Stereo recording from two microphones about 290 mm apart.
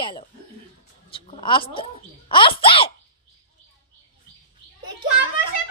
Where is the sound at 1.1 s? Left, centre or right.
Centre.